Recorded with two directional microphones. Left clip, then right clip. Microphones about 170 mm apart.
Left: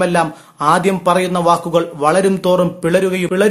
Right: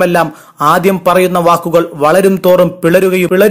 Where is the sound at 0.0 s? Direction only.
35° right (ahead or behind).